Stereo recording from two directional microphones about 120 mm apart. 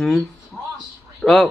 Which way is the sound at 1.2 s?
Centre (ahead or behind).